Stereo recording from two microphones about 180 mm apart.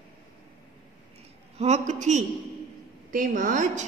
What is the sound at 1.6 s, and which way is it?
A woman's voice, 40° right (ahead or behind).